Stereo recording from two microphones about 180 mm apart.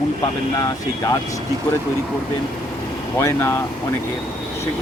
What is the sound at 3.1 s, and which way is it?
Speech, 15° left (ahead or behind).